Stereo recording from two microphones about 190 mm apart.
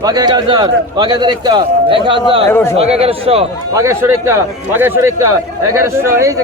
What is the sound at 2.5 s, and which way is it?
Speech, 10° left (ahead or behind).